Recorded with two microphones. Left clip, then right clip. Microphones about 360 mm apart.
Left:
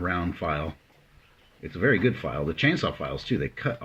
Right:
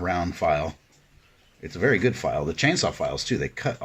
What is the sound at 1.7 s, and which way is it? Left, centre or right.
Speech, centre.